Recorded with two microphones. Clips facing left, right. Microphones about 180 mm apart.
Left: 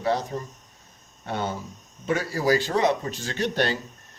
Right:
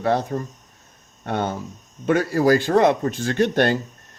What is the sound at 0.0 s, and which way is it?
A man's voice, 55° right (ahead or behind).